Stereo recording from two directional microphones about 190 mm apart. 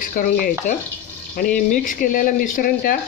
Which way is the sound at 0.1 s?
45° left (ahead or behind).